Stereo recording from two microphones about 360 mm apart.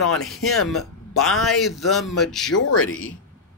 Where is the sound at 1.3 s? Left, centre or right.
Centre.